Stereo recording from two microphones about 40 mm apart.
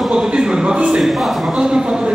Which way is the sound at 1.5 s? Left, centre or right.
Centre.